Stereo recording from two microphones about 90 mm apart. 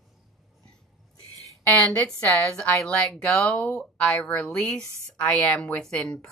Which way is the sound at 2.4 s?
15° left (ahead or behind).